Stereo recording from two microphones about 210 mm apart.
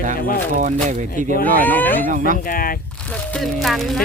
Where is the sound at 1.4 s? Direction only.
10° left (ahead or behind).